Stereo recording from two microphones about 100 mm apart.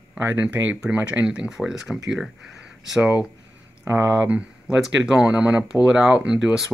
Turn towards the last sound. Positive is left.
turn(degrees=-5)  # may be behind; listen again after turning